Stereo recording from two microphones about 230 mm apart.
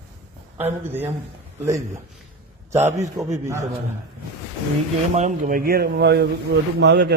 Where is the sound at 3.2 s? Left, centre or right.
Centre.